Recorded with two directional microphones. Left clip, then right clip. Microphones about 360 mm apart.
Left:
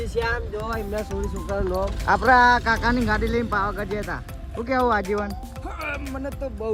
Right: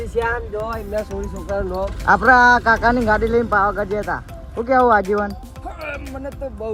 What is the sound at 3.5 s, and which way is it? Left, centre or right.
Speech, right.